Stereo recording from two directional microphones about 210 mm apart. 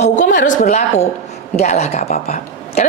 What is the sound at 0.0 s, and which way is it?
Speech, 35° left (ahead or behind).